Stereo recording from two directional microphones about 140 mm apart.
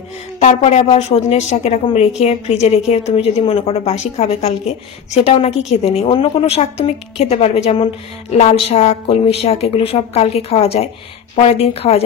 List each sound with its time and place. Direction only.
0.4 s a woman's voice: 55° left (ahead or behind)